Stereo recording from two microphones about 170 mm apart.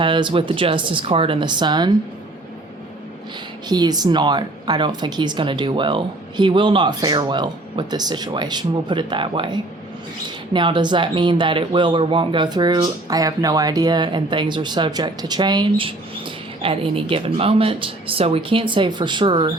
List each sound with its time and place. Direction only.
0.0 s a woman's voice: 30° right (ahead or behind)
3.7 s a woman's voice: 25° right (ahead or behind)